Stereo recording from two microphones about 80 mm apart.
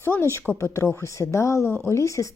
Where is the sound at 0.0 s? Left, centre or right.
Left.